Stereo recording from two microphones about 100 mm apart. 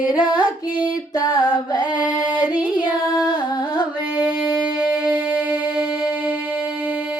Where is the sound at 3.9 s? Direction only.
10° right (ahead or behind).